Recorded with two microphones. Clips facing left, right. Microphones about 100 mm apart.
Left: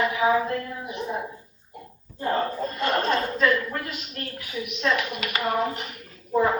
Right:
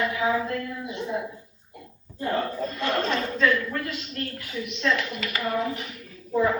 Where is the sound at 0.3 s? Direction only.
40° left (ahead or behind).